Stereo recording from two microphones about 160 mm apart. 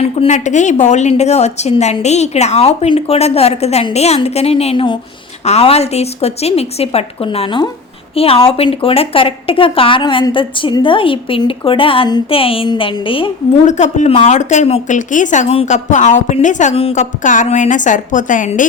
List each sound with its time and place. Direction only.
0.0 s a woman's voice: 45° left (ahead or behind)
13.7 s speech: 50° left (ahead or behind)